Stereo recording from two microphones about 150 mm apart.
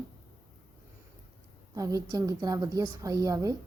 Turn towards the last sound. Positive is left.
turn(degrees=-20)  # may be behind; listen again after turning